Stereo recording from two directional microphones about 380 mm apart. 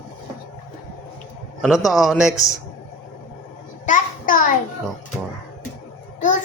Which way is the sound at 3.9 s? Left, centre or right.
Left.